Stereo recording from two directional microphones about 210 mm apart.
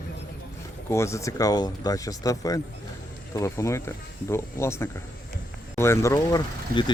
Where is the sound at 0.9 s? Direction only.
15° left (ahead or behind).